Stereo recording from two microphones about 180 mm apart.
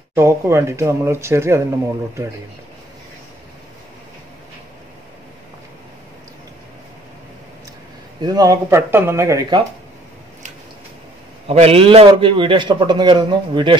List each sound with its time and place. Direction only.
0.1 s speech: 15° right (ahead or behind)
8.2 s speech: 20° right (ahead or behind)
11.4 s a man's voice: 35° right (ahead or behind)